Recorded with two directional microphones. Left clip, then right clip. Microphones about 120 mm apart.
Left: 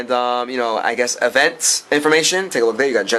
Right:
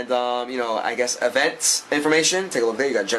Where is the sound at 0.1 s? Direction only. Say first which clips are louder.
Left 5 dB; 20° left (ahead or behind).